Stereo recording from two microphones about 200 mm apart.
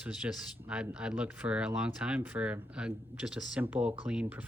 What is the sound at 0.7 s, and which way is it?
Speech, 5° right (ahead or behind).